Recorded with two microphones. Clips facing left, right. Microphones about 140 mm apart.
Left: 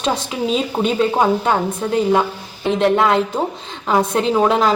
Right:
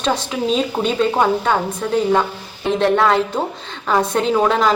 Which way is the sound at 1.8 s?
15° left (ahead or behind).